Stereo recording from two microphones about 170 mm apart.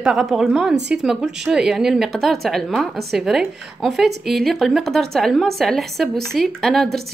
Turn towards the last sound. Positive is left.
turn(degrees=0)  # may be behind; listen again after turning